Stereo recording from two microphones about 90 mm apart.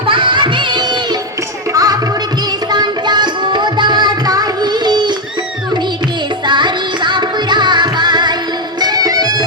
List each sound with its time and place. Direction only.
0.1 s music: 65° right (ahead or behind)
1.7 s music: 45° right (ahead or behind)
2.7 s music: 55° right (ahead or behind)
6.5 s music: 60° right (ahead or behind)